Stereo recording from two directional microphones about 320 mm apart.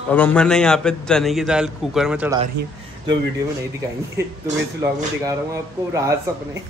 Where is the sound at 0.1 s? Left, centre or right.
Centre.